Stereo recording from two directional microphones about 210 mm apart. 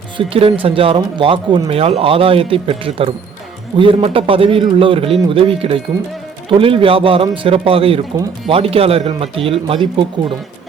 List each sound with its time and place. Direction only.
0.2 s speech: 25° right (ahead or behind)